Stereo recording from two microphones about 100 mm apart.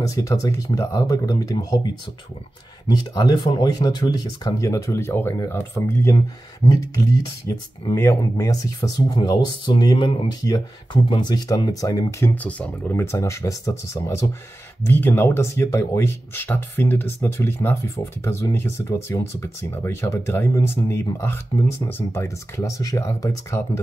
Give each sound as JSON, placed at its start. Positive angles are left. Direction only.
{"t": 0.0, "sound": "speech", "side_deg": 35}
{"t": 2.9, "sound": "speech", "side_deg": 45}
{"t": 7.9, "sound": "speech", "side_deg": 30}
{"t": 9.7, "sound": "speech", "side_deg": 50}
{"t": 10.4, "sound": "speech", "side_deg": 40}
{"t": 12.4, "sound": "speech", "side_deg": 15}
{"t": 14.9, "sound": "speech", "side_deg": 20}